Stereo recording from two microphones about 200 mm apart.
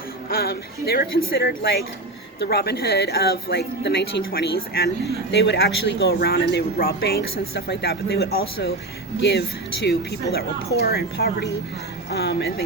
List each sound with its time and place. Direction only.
0.3 s speech: 50° left (ahead or behind)
9.8 s speech: 55° left (ahead or behind)